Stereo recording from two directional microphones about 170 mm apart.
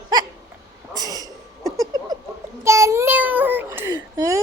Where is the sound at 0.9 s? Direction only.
20° right (ahead or behind).